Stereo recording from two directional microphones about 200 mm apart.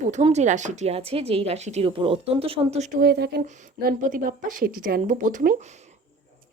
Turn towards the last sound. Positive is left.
turn(degrees=-35)  # may be behind; listen again after turning